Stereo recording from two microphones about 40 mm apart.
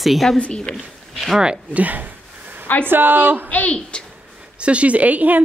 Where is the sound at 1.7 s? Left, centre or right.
Right.